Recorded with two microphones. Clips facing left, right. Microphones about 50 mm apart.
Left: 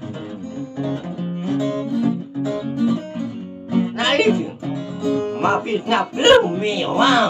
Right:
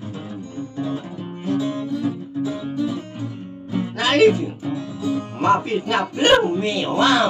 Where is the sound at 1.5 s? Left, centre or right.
Centre.